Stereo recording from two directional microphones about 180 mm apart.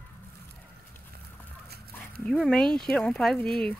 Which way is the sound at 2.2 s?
Centre (ahead or behind).